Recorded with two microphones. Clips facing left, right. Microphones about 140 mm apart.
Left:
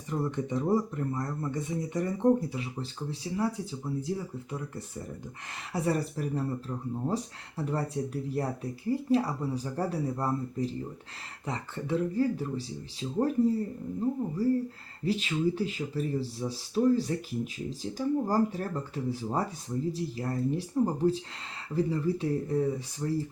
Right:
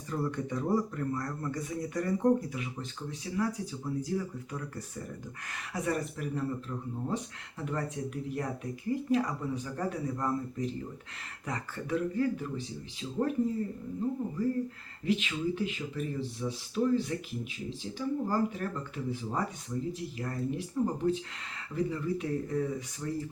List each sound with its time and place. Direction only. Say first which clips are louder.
0.1 s speech: left 2 dB; 20° left (ahead or behind)
5.7 s speech: left 3 dB; 30° left (ahead or behind)
14.4 s speech: left 4 dB; 35° left (ahead or behind)